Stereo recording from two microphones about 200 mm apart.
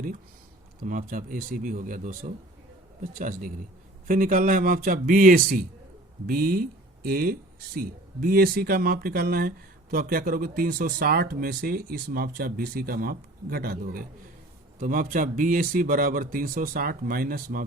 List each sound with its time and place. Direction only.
0.9 s speech: 40° right (ahead or behind)